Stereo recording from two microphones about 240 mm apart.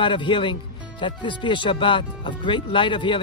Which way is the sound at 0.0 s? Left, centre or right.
Centre.